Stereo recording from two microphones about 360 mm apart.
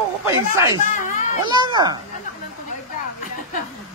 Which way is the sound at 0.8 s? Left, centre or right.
Left.